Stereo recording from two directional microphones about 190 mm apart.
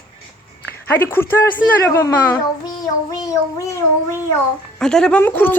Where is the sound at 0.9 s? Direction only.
10° left (ahead or behind).